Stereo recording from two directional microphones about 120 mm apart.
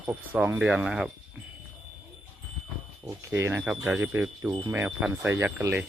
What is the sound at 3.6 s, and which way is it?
Speech, 10° right (ahead or behind).